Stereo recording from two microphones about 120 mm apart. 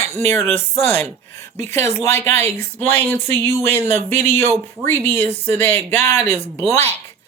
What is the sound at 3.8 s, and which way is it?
Speech, 70° right (ahead or behind).